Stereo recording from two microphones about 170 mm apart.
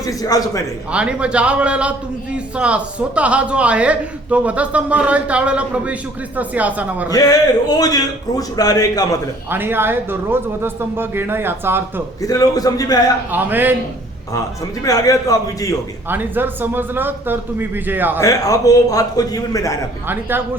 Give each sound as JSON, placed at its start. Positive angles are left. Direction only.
{"t": 0.0, "sound": "a man's voice", "side_deg": 20}
{"t": 0.9, "sound": "a man's voice", "side_deg": -5}
{"t": 7.1, "sound": "a man's voice", "side_deg": 20}
{"t": 9.5, "sound": "a man's voice", "side_deg": -10}
{"t": 12.2, "sound": "a man's voice", "side_deg": 20}
{"t": 13.3, "sound": "a man's voice", "side_deg": -10}
{"t": 14.8, "sound": "a man's voice", "side_deg": 20}
{"t": 16.0, "sound": "a man's voice", "side_deg": -10}
{"t": 18.2, "sound": "a man's voice", "side_deg": 20}